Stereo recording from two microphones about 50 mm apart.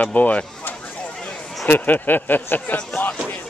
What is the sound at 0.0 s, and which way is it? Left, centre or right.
Speech, left.